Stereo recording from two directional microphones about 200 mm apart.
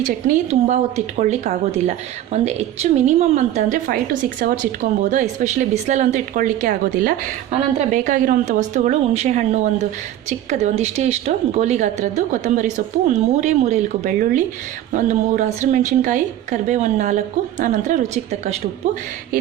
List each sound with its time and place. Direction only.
0.0 s a woman's voice: 40° right (ahead or behind)